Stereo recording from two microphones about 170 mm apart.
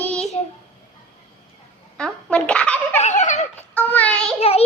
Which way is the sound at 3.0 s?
45° left (ahead or behind).